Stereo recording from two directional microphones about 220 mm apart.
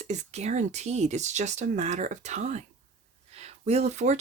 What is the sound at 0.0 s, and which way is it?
Speech, 30° right (ahead or behind).